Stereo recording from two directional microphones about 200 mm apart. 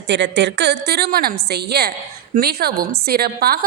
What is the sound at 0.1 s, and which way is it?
A woman's voice, 60° right (ahead or behind).